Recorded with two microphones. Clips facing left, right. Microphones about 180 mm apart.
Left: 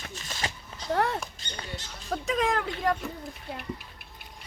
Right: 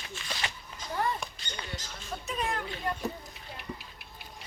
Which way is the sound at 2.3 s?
90° left.